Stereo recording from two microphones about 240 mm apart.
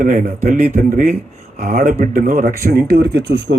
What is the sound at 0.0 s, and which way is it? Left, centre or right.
A man's voice, right.